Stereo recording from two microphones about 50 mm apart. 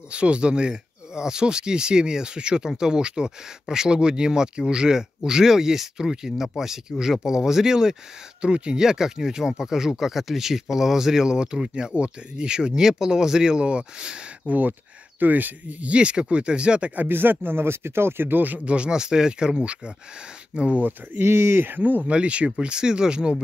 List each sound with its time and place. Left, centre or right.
0.1 s speech: right
14.5 s speech: right
17.1 s speech: right
18.7 s speech: centre
20.8 s speech: right
22.1 s speech: right